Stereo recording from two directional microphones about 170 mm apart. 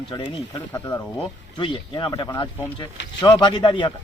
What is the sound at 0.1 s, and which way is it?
Speech, 20° left (ahead or behind).